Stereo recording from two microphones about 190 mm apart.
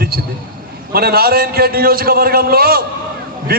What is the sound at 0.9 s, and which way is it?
A man's voice, 55° right (ahead or behind).